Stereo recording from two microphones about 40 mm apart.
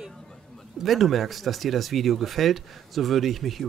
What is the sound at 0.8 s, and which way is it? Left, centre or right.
Speech, centre.